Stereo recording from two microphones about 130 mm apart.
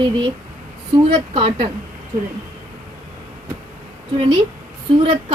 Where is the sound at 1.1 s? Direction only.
40° right (ahead or behind).